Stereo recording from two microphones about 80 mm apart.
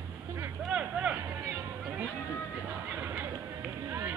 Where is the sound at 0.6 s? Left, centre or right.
Centre.